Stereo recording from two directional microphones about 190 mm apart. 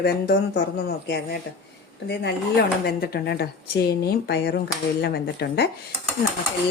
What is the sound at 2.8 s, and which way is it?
A woman's voice, 55° left (ahead or behind).